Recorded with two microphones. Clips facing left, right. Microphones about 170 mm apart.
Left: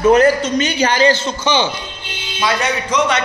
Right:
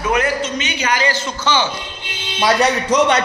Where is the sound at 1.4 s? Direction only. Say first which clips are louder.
Left 2 dB; 15° left (ahead or behind).